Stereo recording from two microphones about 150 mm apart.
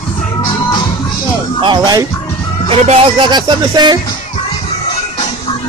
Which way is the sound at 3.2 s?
30° right (ahead or behind).